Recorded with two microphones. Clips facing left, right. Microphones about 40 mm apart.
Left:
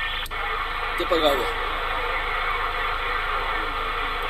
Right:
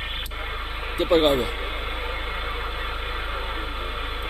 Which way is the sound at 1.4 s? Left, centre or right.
Left.